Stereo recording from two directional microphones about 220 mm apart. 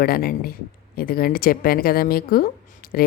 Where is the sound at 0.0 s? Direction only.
45° left (ahead or behind).